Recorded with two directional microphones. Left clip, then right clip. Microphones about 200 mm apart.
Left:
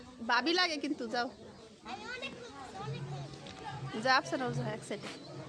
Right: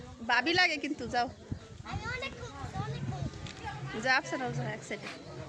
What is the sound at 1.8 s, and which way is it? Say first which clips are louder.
Children playing: right 4 dB; 25° right (ahead or behind).